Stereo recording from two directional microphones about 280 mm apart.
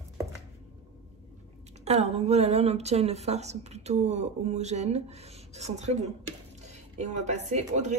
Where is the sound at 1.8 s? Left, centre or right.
Right.